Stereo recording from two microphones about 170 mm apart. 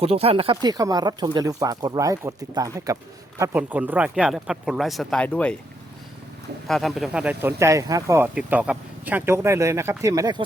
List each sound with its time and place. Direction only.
0.0 s speech: 35° right (ahead or behind); by 5.5 s 10° left (ahead or behind)
6.7 s speech: centre (ahead or behind); by 10.4 s 20° right (ahead or behind)